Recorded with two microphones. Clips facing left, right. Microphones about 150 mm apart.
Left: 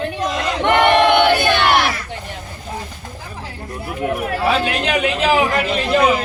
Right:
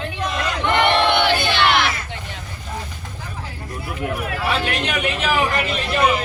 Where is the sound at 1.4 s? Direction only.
50° left (ahead or behind).